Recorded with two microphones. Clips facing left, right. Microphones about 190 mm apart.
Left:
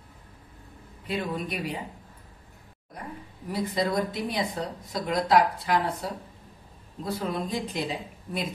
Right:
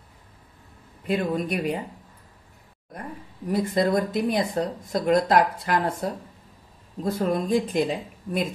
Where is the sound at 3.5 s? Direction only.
50° right (ahead or behind).